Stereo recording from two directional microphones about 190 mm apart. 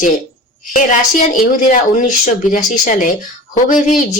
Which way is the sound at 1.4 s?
45° left (ahead or behind).